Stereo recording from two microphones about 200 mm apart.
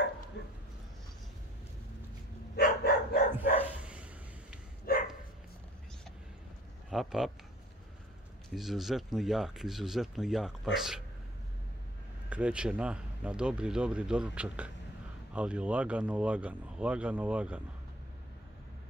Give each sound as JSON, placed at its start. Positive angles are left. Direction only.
{"t": 0.4, "sound": "bow-wow", "side_deg": 60}
{"t": 2.5, "sound": "dog", "side_deg": 55}
{"t": 3.8, "sound": "a sound", "side_deg": -5}
{"t": 4.9, "sound": "dog", "side_deg": 45}
{"t": 6.9, "sound": "speech", "side_deg": 0}
{"t": 8.5, "sound": "speech", "side_deg": 0}
{"t": 12.3, "sound": "speech", "side_deg": -5}